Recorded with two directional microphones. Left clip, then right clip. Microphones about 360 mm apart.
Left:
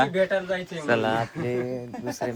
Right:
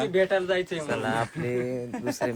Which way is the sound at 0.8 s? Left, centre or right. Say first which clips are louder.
Left 6 dB; left.